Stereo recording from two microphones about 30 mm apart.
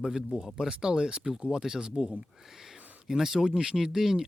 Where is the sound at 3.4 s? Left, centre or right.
Centre.